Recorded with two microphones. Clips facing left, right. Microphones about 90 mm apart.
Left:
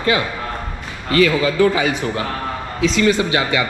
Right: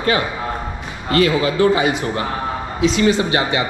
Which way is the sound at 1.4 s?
25° right (ahead or behind).